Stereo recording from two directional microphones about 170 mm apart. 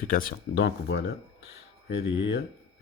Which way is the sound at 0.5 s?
90° left.